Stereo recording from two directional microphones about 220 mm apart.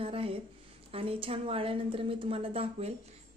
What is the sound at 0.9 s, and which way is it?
A woman's voice, 25° right (ahead or behind).